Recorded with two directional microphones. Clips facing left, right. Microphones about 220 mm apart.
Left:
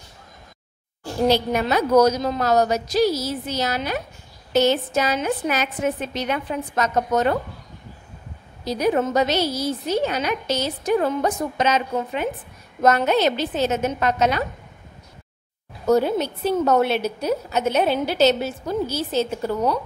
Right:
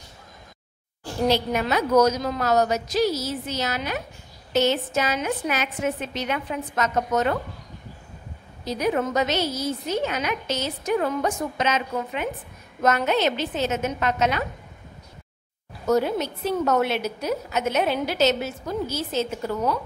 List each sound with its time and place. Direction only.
1.5 s a woman's voice: 35° left (ahead or behind)
8.6 s a woman's voice: 35° left (ahead or behind)
15.9 s a woman's voice: 30° left (ahead or behind)